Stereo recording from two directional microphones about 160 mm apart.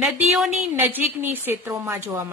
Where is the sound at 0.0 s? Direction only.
Centre (ahead or behind).